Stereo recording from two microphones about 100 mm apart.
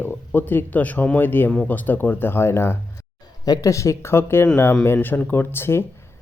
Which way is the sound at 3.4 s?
35° left (ahead or behind).